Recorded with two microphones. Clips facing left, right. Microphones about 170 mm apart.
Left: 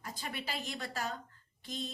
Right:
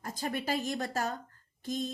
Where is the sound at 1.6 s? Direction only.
45° right (ahead or behind).